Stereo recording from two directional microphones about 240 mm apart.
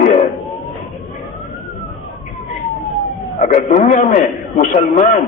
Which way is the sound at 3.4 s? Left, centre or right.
Left.